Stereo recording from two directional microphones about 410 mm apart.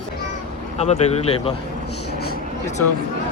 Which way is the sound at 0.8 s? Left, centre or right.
Centre.